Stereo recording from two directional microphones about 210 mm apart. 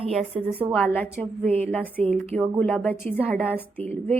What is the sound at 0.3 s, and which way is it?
Speech, 30° right (ahead or behind).